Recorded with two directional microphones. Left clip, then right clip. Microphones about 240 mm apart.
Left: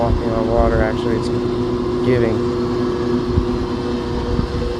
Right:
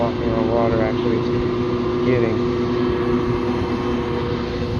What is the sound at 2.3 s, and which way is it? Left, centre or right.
Vehicle, left.